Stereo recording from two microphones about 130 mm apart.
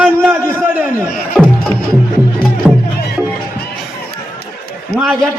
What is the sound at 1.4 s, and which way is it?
Music, 5° left (ahead or behind).